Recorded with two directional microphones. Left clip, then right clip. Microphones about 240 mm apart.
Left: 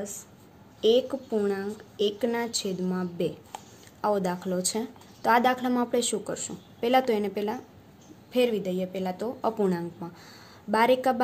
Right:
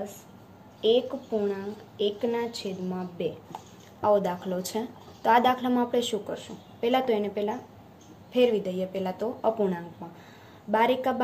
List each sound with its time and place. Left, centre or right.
0.7 s a woman's voice: left
4.0 s a woman's voice: left